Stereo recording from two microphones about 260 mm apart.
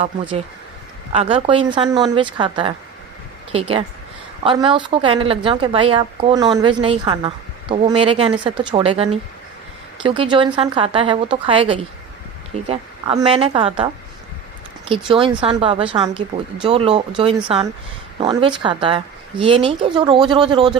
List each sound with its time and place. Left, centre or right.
0.0 s a woman's voice: centre